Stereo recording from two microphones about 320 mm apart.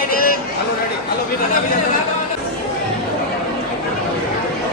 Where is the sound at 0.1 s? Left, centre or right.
Left.